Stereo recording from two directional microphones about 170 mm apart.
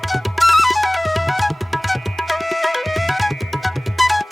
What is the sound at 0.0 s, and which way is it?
Music, centre (ahead or behind).